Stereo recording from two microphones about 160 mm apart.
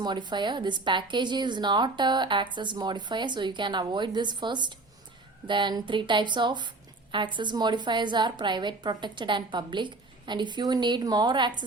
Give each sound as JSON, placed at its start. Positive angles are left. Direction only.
{"t": 0.0, "sound": "a woman's voice", "side_deg": -30}